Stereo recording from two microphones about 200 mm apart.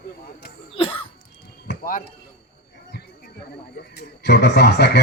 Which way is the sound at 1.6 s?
45° left (ahead or behind).